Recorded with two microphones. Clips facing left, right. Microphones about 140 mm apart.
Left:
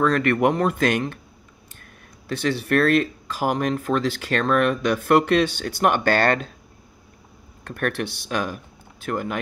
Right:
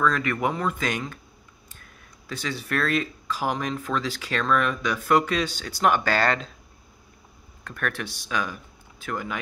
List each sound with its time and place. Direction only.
0.0 s speech: 65° left (ahead or behind)
2.2 s speech: 65° left (ahead or behind)
7.6 s speech: 55° left (ahead or behind)